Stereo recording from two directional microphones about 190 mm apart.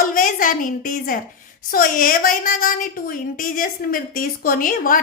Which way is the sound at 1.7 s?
50° left (ahead or behind).